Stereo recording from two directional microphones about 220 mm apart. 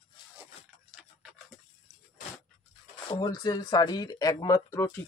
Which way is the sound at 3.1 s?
20° left (ahead or behind).